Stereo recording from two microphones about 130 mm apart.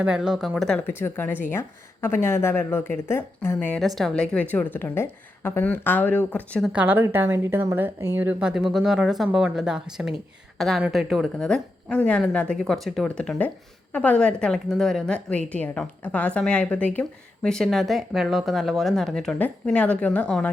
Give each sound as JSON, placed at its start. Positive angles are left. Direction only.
{"t": 0.0, "sound": "speech", "side_deg": -5}
{"t": 0.9, "sound": "a woman's voice", "side_deg": 15}
{"t": 3.8, "sound": "a woman's voice", "side_deg": 0}
{"t": 6.7, "sound": "a woman's voice", "side_deg": -15}